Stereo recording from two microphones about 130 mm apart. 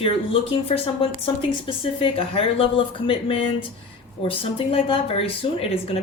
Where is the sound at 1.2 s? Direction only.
45° left (ahead or behind).